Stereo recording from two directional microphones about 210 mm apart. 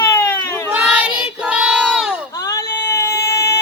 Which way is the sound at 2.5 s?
15° left (ahead or behind).